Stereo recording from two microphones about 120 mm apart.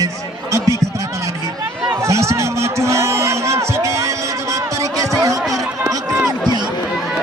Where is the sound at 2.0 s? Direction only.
25° right (ahead or behind).